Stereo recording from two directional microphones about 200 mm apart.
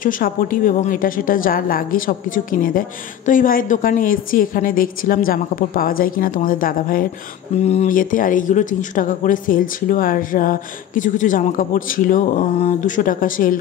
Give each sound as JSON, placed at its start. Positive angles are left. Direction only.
{"t": 0.0, "sound": "speech", "side_deg": 45}
{"t": 7.5, "sound": "speech", "side_deg": 35}